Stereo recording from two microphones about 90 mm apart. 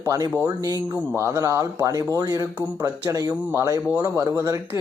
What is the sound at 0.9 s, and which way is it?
Speech, 25° right (ahead or behind).